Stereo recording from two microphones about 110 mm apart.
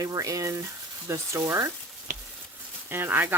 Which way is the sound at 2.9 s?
20° right (ahead or behind).